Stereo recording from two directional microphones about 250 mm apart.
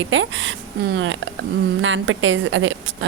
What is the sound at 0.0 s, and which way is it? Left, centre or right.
A woman's voice, right.